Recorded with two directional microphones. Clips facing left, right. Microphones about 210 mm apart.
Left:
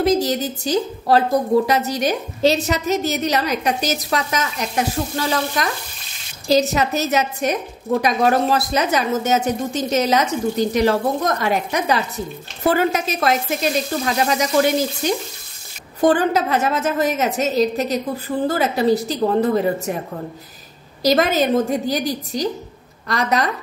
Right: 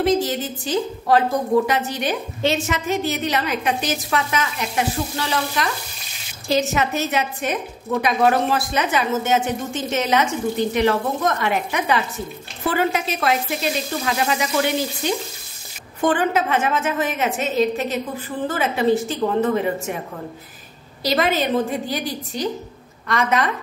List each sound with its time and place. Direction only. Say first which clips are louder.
0.0 s a woman's voice: left 2 dB; 40° left (ahead or behind)
21.0 s a woman's voice: left 4 dB; 45° left (ahead or behind)